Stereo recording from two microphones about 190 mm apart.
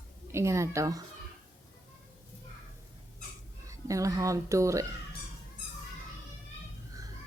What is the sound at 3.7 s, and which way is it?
Speech, 15° right (ahead or behind).